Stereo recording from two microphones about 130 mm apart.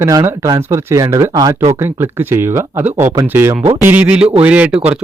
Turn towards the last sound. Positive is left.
turn(degrees=-10)  # may be behind; listen again after turning